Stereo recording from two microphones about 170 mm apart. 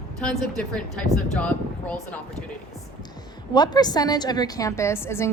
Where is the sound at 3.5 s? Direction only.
25° left (ahead or behind).